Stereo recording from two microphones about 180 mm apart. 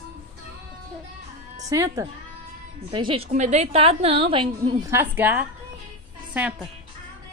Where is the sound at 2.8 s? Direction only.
30° right (ahead or behind).